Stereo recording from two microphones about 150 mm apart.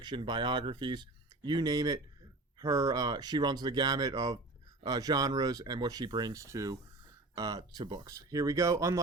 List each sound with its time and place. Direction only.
0.0 s speech: 30° right (ahead or behind)